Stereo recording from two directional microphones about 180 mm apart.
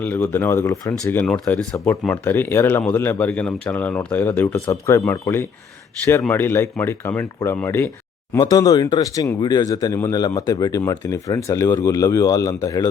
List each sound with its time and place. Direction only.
0.0 s speech: 10° left (ahead or behind)